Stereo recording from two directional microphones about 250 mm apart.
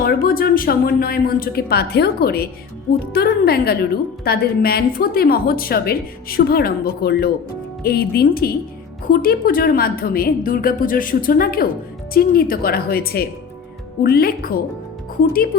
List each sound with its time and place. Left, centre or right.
0.0 s a woman's voice: left